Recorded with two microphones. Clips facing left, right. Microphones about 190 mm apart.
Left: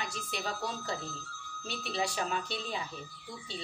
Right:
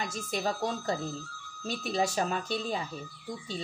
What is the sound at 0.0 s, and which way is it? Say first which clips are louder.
Speech: right 6 dB; 45° right (ahead or behind).